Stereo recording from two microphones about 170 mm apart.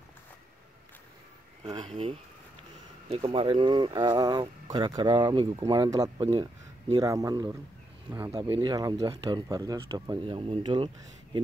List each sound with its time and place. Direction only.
1.6 s speech: 25° right (ahead or behind)
3.1 s speech: 35° right (ahead or behind)